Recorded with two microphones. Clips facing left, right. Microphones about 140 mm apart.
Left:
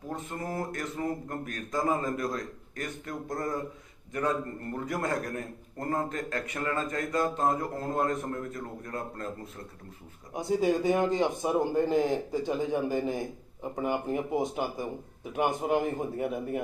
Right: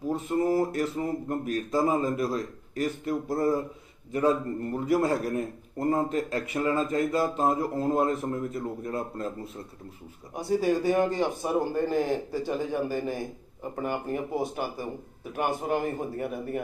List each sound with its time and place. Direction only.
0.5 s a man's voice: 25° right (ahead or behind)
10.3 s speech: 20° left (ahead or behind)
15.8 s a man's voice: 5° left (ahead or behind)